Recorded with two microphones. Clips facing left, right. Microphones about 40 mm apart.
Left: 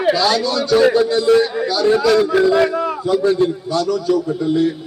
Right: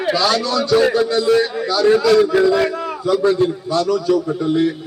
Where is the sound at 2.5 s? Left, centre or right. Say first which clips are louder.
Left 3 dB; centre.